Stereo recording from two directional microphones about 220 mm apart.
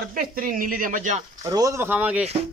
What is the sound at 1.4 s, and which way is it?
Speech, 15° right (ahead or behind).